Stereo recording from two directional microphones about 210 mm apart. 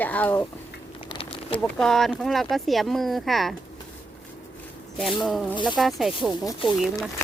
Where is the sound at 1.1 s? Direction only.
25° left (ahead or behind).